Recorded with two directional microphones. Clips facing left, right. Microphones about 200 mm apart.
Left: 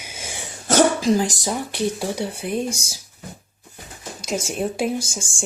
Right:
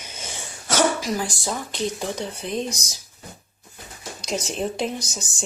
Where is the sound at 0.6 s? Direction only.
30° left (ahead or behind); by 2.7 s 10° left (ahead or behind).